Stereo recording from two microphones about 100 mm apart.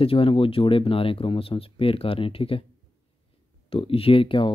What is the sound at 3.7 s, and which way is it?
Speech, 65° left (ahead or behind).